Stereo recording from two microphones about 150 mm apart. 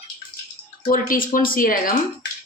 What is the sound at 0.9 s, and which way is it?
Speech, 65° left (ahead or behind).